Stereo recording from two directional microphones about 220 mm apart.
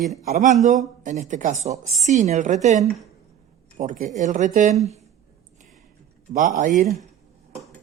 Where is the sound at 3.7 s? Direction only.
35° right (ahead or behind).